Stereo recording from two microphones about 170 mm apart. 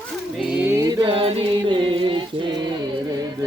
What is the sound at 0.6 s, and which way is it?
Music, 15° right (ahead or behind).